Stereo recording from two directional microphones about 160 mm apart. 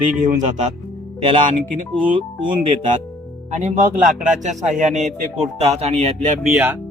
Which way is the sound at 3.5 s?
45° right (ahead or behind).